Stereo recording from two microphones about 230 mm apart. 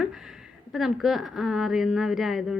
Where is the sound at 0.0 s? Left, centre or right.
Centre.